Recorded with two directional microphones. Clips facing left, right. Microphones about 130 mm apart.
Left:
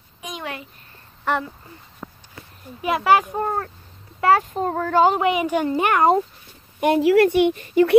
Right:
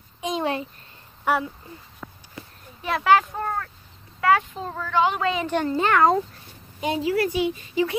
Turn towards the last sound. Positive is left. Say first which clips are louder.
# left 7 dB
turn(degrees=60)  # may be behind; listen again after turning